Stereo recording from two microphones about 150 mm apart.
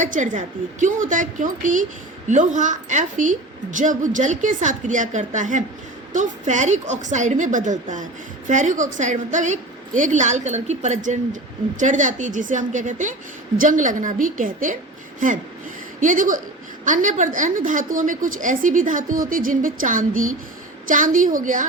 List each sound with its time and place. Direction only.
0.0 s a woman's voice: 60° right (ahead or behind)
16.0 s a woman's voice: 60° right (ahead or behind)